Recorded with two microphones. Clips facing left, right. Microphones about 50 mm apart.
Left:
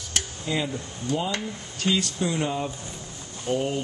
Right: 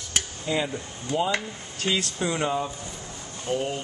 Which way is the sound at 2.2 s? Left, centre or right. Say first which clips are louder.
Right 1 dB; centre.